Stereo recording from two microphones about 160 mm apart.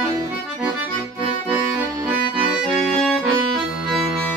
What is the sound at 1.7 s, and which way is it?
Accordion, 5° right (ahead or behind).